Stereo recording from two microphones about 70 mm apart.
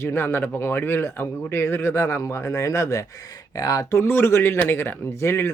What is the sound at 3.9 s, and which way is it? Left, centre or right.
Speech, left.